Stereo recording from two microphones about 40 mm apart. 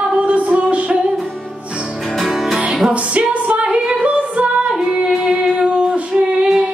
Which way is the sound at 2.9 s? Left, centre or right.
Right.